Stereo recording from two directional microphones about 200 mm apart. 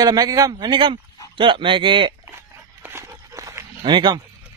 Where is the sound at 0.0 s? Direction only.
20° right (ahead or behind).